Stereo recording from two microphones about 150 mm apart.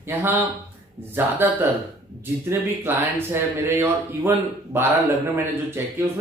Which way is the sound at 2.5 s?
15° right (ahead or behind).